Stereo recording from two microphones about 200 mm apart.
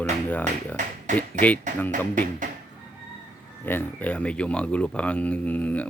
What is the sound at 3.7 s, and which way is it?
Speech, 10° left (ahead or behind).